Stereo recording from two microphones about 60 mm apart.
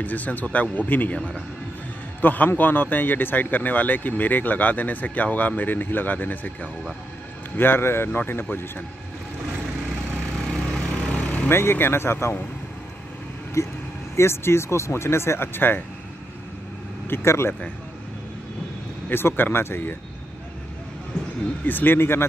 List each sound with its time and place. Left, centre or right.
0.0 s speech: left
1.1 s speech: centre
2.2 s speech: left
10.5 s a sound: centre
11.0 s vehicle: left
11.4 s speech: left
13.6 s speech: left
14.1 s speech: left
17.1 s speech: left
19.0 s speech: left
21.6 s speech: left